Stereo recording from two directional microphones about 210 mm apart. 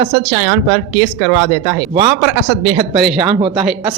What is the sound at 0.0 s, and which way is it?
Speech, 20° right (ahead or behind).